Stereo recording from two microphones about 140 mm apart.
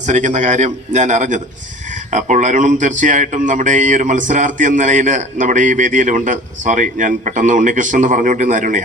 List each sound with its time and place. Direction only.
0.0 s speech: 60° right (ahead or behind)